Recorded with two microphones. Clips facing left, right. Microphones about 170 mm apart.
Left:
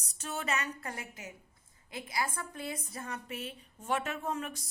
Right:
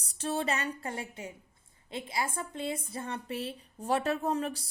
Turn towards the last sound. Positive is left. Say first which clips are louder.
# right 5 dB
turn(degrees=-35)  # may be behind; listen again after turning